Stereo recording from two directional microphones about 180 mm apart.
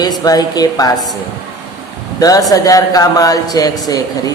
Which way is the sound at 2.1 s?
20° left (ahead or behind).